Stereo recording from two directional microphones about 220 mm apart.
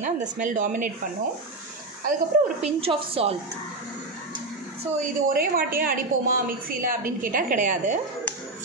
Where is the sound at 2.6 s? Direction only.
25° right (ahead or behind).